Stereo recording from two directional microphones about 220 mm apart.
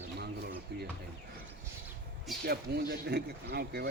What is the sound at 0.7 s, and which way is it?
Speech, 45° right (ahead or behind).